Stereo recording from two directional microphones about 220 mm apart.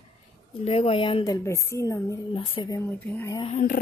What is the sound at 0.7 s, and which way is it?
Speech, 25° left (ahead or behind).